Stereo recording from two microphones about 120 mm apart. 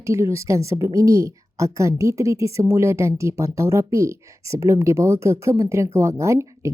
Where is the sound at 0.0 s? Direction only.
25° right (ahead or behind).